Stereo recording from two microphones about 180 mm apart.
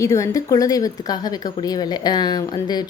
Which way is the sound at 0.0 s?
15° left (ahead or behind).